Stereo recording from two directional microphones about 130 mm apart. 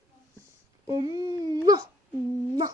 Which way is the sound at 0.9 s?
30° right (ahead or behind).